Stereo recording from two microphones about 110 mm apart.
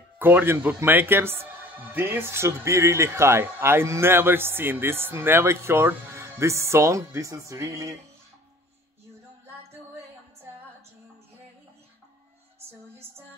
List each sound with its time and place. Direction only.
0.2 s speech: 15° right (ahead or behind)